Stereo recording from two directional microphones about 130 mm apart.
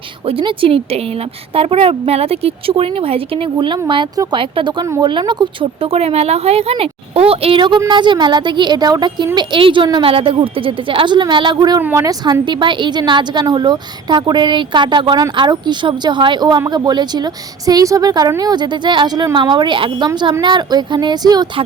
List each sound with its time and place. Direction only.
0.3 s a woman's voice: 45° right (ahead or behind)
5.8 s a woman's voice: 50° right (ahead or behind); by 11.8 s 30° right (ahead or behind)
11.8 s speech: 15° right (ahead or behind)
12.0 s speech: 35° right (ahead or behind)